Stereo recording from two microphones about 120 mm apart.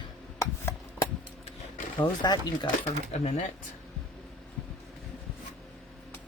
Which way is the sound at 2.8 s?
65° left (ahead or behind).